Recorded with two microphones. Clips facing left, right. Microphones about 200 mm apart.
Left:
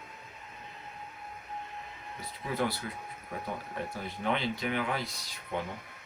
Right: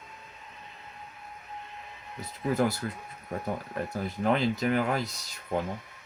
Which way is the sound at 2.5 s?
45° right (ahead or behind).